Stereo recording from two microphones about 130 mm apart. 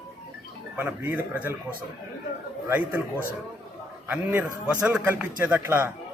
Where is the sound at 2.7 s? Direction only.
15° right (ahead or behind).